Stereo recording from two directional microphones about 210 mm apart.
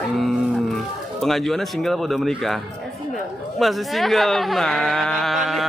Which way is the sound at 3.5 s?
Centre (ahead or behind).